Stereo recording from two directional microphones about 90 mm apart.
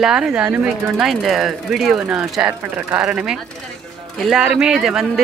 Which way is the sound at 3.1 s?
10° right (ahead or behind).